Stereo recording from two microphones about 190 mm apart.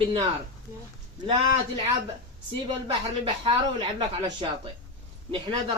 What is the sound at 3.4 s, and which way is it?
A man's voice, 30° right (ahead or behind).